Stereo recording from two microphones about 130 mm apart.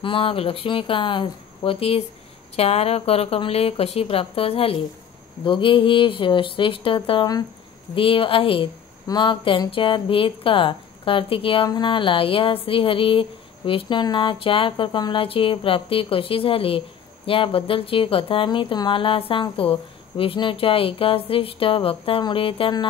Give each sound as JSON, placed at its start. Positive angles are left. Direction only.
{"t": 0.0, "sound": "speech", "side_deg": 45}